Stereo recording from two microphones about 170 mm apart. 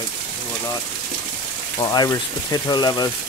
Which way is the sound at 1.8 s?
20° left (ahead or behind).